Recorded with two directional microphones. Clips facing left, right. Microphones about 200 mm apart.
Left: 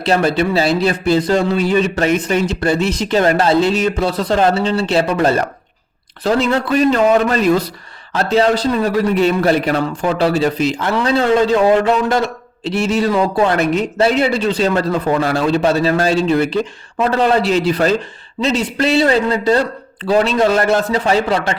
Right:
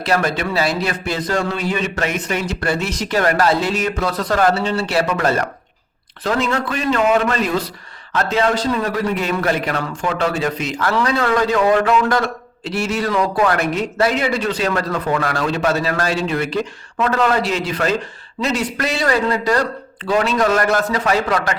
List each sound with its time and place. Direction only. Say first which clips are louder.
0.0 s a man's voice: left 4 dB; 30° left (ahead or behind)